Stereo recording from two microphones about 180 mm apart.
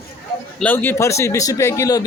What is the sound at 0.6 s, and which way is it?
Speech, 10° left (ahead or behind).